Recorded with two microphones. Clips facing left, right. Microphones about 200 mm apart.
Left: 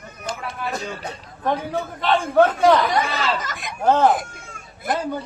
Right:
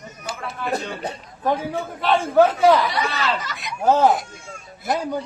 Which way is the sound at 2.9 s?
50° left (ahead or behind).